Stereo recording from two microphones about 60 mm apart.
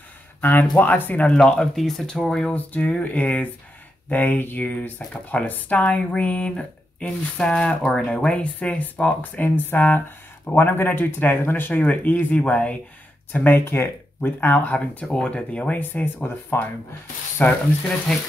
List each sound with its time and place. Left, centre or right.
0.4 s speech: left; by 2.5 s centre
2.5 s speech: left
11.8 s speech: left
15.8 s speech: left